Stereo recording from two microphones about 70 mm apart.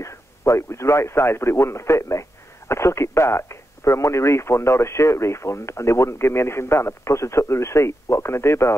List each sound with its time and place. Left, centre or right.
0.0 s a man's voice: left